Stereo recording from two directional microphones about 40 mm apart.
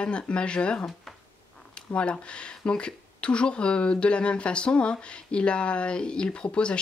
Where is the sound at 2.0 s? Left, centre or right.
Left.